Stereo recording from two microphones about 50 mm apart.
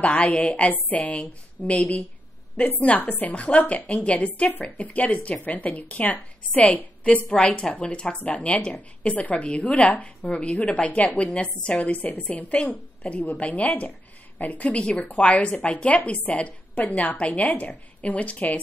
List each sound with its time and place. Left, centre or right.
0.0 s a woman's voice: left